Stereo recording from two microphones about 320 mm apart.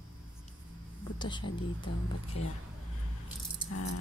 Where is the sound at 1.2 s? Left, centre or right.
Centre.